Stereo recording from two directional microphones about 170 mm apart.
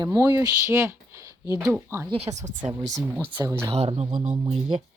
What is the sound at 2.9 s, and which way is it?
Speech, 10° right (ahead or behind).